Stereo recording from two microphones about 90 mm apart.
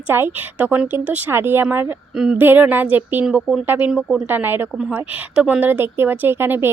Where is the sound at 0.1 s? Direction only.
25° right (ahead or behind).